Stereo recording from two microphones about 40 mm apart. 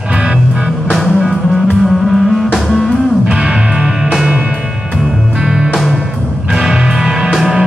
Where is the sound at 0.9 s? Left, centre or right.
Centre.